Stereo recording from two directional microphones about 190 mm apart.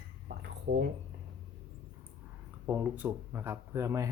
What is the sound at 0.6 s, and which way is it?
Speech, 65° right (ahead or behind).